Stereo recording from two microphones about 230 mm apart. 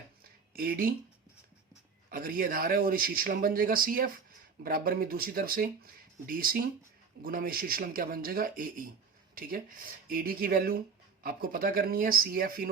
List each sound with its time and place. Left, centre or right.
0.5 s speech: right
2.0 s speech: right